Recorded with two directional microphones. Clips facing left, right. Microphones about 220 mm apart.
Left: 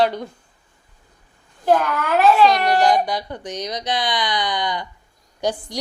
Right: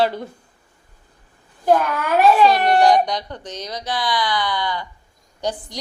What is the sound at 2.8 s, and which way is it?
Speech, 5° left (ahead or behind).